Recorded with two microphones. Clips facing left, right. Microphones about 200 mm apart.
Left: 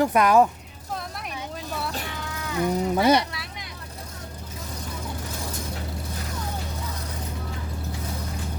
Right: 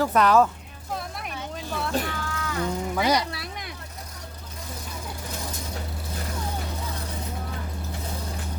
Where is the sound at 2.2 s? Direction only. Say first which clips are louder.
Left 2 dB; 20° left (ahead or behind).